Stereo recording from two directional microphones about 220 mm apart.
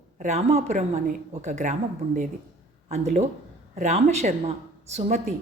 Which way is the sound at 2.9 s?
30° right (ahead or behind).